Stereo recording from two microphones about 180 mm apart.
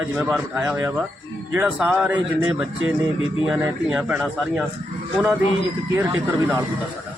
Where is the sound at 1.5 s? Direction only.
5° right (ahead or behind).